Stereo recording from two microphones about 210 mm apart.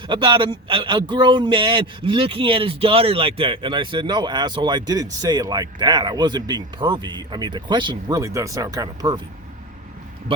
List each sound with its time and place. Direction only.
0.1 s speech: 20° right (ahead or behind)